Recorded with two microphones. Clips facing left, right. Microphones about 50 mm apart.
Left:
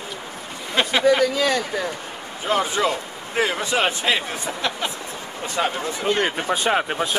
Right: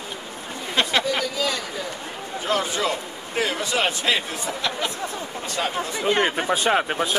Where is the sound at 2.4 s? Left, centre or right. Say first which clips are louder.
Left 3 dB; centre.